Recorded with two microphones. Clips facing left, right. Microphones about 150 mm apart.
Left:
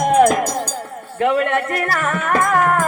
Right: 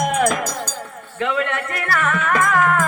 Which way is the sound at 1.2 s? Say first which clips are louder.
Left 6 dB; 45° left (ahead or behind).